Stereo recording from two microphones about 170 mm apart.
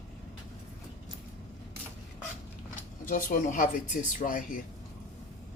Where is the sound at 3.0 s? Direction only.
50° left (ahead or behind).